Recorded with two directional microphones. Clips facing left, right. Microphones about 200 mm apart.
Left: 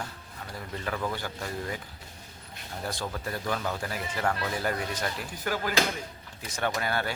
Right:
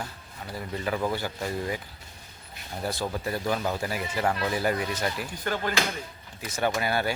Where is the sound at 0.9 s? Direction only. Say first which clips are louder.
Right 4 dB; 10° right (ahead or behind).